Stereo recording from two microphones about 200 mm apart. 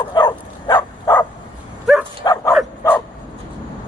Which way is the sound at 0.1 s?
20° left (ahead or behind).